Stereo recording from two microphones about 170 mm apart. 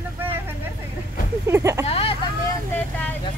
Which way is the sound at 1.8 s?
35° left (ahead or behind).